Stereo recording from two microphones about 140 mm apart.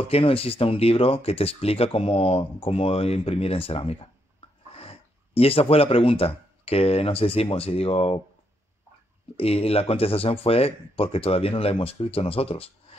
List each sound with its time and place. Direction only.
0.0 s speech: 40° left (ahead or behind)
9.4 s speech: 45° left (ahead or behind)